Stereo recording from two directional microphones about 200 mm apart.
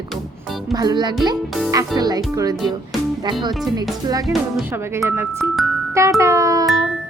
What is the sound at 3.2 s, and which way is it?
A woman's voice, 20° right (ahead or behind).